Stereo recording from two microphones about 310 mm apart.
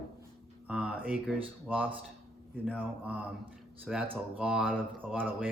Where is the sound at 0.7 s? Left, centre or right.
Centre.